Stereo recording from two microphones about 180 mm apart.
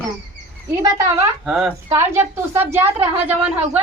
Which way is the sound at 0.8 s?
15° right (ahead or behind).